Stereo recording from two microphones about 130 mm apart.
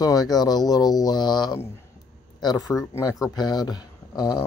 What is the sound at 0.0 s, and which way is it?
Speech, 30° left (ahead or behind).